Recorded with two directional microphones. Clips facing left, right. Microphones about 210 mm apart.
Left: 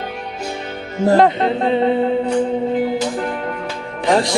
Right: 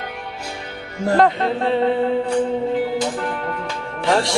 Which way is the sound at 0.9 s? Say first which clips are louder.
Left 3 dB; 20° left (ahead or behind).